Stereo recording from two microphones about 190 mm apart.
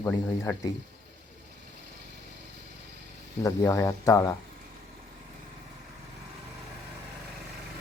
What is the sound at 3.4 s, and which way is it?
Speech, 15° left (ahead or behind).